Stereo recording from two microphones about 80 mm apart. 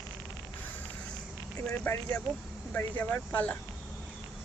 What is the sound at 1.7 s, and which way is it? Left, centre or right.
Speech, centre.